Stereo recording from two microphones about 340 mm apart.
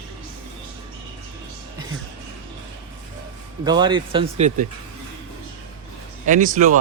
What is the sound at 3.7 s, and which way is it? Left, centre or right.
Speech, centre.